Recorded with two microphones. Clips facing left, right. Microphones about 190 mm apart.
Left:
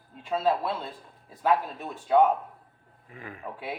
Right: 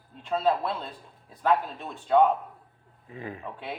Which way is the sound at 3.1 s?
25° right (ahead or behind).